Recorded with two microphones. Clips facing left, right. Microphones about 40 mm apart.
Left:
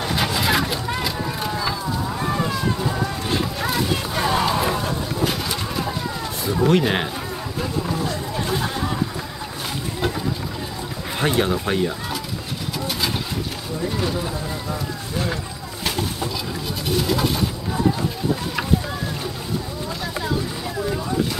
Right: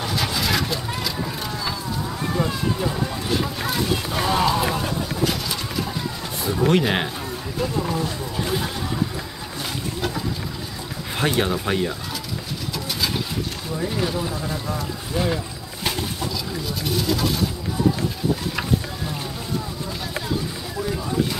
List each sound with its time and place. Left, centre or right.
0.0 s a sound: centre
3.0 s run: centre
3.6 s a sound: centre
6.6 s speech: centre
7.6 s a sound: centre
8.0 s chatter: centre
11.1 s speech: centre
12.7 s vehicle: centre
13.7 s speech: centre
16.8 s speech: centre